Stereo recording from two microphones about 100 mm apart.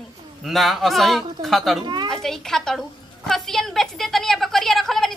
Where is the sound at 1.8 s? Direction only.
50° right (ahead or behind).